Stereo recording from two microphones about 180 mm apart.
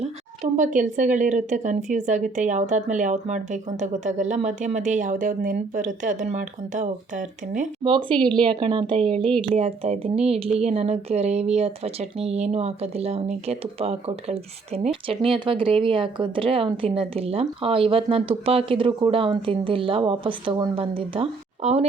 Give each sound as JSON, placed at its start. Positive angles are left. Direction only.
{"t": 0.0, "sound": "a woman's voice", "side_deg": -40}
{"t": 7.9, "sound": "a woman's voice", "side_deg": -30}
{"t": 9.0, "sound": "speech", "side_deg": 5}
{"t": 9.4, "sound": "speech", "side_deg": -35}